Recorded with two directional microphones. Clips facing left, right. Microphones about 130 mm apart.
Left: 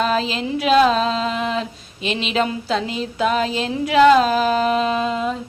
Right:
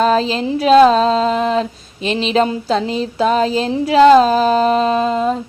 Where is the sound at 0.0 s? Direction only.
35° right (ahead or behind).